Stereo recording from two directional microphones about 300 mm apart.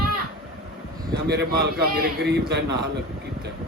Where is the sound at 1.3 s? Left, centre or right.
Right.